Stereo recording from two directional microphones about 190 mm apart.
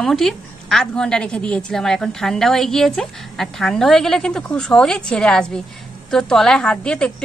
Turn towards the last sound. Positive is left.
turn(degrees=5)  # may be behind; listen again after turning